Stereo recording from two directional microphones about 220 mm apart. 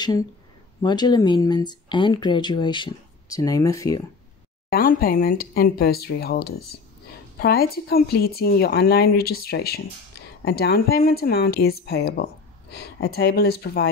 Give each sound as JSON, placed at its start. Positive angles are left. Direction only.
{"t": 0.8, "sound": "speech", "side_deg": 20}
{"t": 4.6, "sound": "a woman's voice", "side_deg": 40}